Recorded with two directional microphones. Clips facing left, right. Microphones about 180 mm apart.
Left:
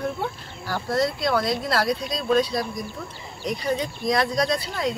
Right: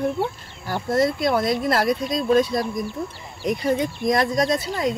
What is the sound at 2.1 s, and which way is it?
Speech, 50° right (ahead or behind).